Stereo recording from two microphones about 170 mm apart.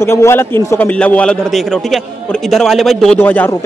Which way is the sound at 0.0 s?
15° left (ahead or behind).